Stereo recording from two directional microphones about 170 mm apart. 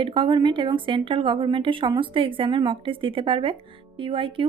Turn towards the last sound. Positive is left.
turn(degrees=-30)  # may be behind; listen again after turning